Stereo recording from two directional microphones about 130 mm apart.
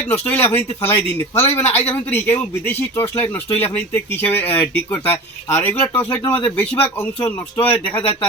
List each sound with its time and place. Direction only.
0.1 s a man's voice: 15° left (ahead or behind)